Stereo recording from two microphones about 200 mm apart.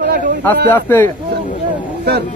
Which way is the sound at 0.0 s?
50° right (ahead or behind).